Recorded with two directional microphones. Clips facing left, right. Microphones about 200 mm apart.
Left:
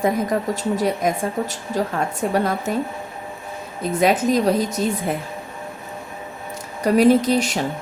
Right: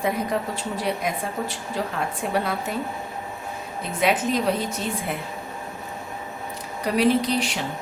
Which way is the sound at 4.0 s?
40° left (ahead or behind).